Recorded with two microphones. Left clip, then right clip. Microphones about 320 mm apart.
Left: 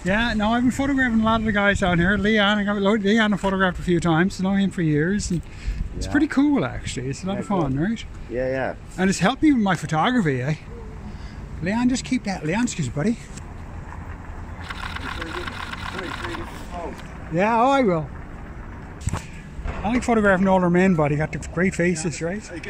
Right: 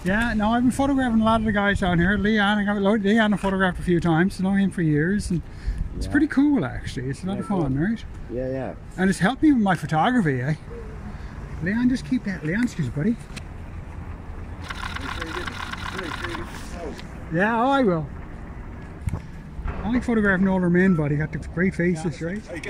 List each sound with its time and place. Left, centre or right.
0.0 s speech: centre
8.4 s speech: left
8.9 s speech: centre
11.6 s speech: centre
14.7 s vehicle: centre
17.4 s speech: centre
19.9 s speech: centre